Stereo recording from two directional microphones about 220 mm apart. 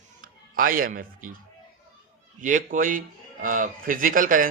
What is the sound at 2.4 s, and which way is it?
A man's voice, 35° right (ahead or behind).